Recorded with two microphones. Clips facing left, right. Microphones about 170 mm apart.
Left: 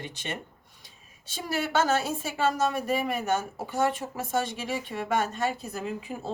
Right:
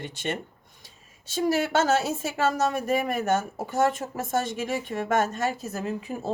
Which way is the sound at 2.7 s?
45° right (ahead or behind).